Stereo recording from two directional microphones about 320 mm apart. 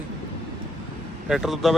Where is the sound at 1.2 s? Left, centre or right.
Centre.